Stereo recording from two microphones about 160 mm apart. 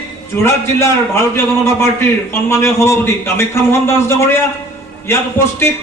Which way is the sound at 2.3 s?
15° left (ahead or behind).